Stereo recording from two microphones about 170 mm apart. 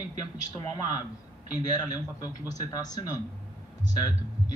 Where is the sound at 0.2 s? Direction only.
25° left (ahead or behind).